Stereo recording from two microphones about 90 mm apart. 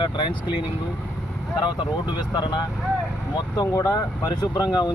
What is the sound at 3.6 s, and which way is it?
Speech, 45° left (ahead or behind).